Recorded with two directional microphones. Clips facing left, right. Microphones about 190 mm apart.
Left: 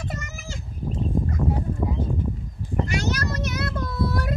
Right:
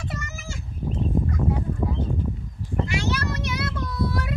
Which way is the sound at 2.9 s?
40° left (ahead or behind).